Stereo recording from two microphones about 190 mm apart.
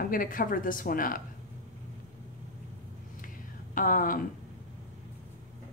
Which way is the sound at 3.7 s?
45° left (ahead or behind).